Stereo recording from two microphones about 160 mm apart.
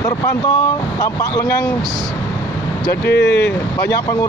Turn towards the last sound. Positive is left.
turn(degrees=90)